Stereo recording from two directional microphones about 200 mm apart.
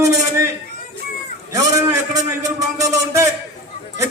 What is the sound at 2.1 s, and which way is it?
A man's voice, 15° right (ahead or behind).